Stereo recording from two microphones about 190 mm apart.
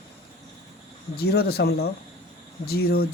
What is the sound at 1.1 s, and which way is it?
Speech, 55° left (ahead or behind).